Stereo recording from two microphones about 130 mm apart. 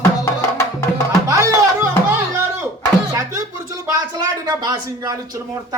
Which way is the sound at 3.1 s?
25° right (ahead or behind).